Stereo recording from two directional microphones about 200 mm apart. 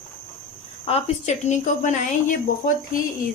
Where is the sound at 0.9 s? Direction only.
30° left (ahead or behind).